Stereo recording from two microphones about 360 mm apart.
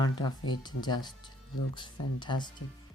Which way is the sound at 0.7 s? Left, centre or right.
Left.